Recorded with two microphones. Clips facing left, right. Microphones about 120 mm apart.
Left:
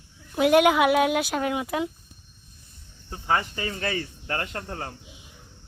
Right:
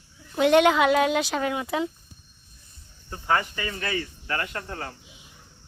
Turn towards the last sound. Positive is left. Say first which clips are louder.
# even
turn(degrees=30)  # may be behind; listen again after turning